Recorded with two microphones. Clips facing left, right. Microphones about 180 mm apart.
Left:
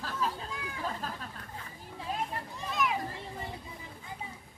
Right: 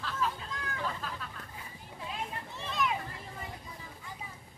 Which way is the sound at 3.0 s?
30° left (ahead or behind).